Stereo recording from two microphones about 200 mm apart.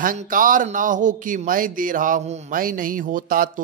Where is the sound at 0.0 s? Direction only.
45° right (ahead or behind).